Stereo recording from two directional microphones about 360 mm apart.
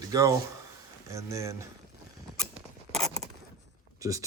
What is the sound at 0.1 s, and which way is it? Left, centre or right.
A man's voice, centre.